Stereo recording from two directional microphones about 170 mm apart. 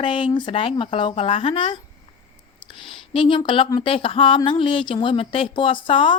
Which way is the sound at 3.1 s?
30° left (ahead or behind).